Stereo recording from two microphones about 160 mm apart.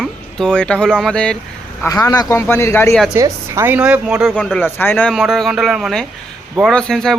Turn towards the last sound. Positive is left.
turn(degrees=5)  # may be behind; listen again after turning